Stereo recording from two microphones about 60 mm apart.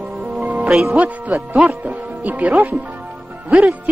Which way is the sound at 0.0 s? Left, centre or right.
Centre.